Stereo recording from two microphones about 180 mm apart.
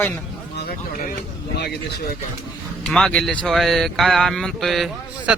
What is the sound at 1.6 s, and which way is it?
Speech, 65° left (ahead or behind).